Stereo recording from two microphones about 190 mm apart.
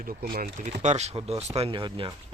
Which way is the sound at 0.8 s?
35° right (ahead or behind).